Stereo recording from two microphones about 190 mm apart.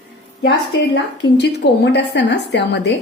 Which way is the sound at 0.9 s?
65° left (ahead or behind).